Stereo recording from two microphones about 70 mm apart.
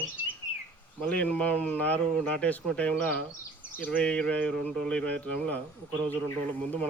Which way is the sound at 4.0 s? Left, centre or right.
Centre.